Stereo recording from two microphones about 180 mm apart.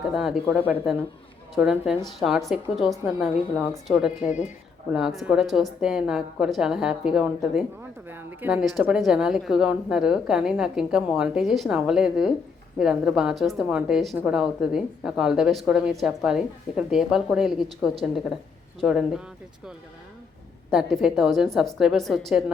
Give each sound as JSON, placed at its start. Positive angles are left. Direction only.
{"t": 0.1, "sound": "a woman's voice", "side_deg": -5}
{"t": 4.3, "sound": "speech", "side_deg": 40}
{"t": 4.9, "sound": "a woman's voice", "side_deg": -5}
{"t": 20.7, "sound": "a woman's voice", "side_deg": 0}